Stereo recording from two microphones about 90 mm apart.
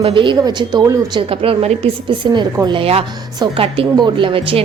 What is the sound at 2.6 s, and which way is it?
A woman's voice, 80° right.